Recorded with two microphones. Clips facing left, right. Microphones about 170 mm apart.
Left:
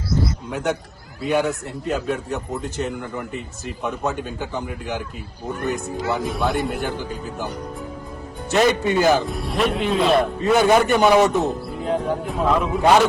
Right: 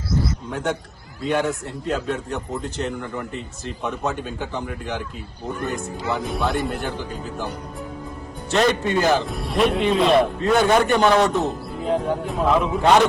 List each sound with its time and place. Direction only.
0.5 s a man's voice: centre (ahead or behind)
8.4 s a man's voice: 5° left (ahead or behind)